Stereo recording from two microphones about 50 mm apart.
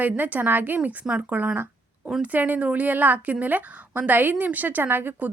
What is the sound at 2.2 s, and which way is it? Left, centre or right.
A woman's voice, right.